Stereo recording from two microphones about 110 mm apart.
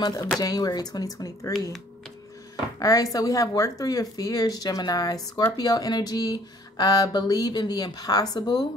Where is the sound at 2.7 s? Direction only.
30° left (ahead or behind).